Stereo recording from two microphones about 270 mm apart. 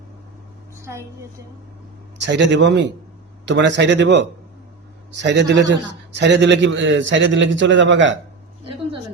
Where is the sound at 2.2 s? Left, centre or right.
Right.